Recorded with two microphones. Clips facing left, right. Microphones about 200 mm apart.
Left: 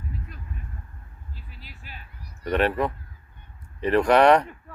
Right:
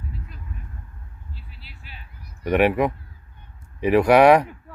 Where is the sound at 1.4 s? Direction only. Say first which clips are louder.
Left 1 dB; 45° left (ahead or behind).